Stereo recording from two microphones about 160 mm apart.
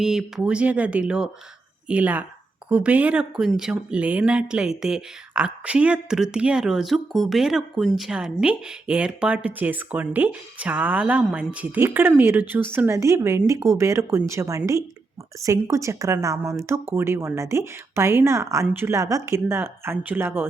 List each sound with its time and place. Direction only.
0.0 s a woman's voice: 5° right (ahead or behind)